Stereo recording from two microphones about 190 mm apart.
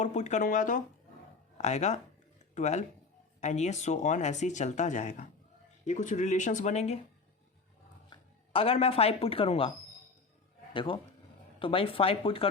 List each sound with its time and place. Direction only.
0.0 s speech: 40° left (ahead or behind)
8.1 s speech: 30° left (ahead or behind)
10.8 s speech: 25° left (ahead or behind)